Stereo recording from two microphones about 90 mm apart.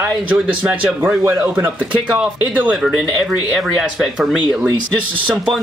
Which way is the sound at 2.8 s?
5° right (ahead or behind).